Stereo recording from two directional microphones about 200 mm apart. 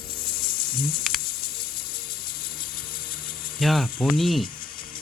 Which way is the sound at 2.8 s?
25° left (ahead or behind).